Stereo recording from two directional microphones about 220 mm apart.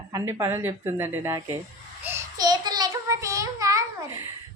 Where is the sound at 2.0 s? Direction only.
15° right (ahead or behind).